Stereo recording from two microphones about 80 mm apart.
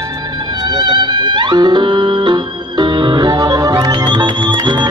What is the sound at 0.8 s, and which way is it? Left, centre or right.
Music, right.